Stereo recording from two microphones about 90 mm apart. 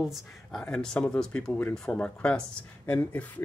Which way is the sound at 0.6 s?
10° left (ahead or behind).